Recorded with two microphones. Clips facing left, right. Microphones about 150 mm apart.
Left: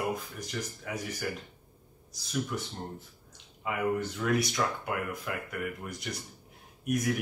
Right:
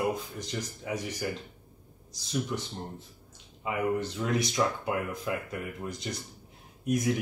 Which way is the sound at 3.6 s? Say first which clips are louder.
Right 1 dB; 20° right (ahead or behind).